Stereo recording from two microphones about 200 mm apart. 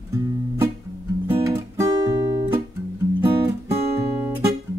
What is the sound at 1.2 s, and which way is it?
Music, 15° right (ahead or behind).